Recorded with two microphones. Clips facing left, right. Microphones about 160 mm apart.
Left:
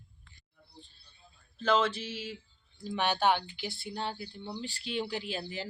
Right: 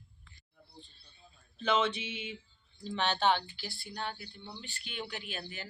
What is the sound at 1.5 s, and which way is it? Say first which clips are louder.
Speech: left 2 dB; centre (ahead or behind).